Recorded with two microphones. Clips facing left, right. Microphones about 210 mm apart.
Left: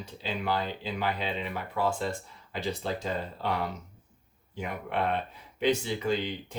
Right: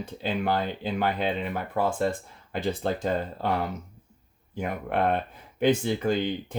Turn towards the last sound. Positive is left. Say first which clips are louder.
# right 4 dB
turn(degrees=-55)  # may be behind; listen again after turning